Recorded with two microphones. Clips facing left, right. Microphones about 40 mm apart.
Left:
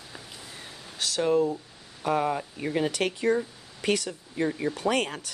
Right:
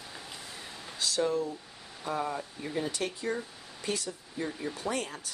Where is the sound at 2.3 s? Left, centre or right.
Left.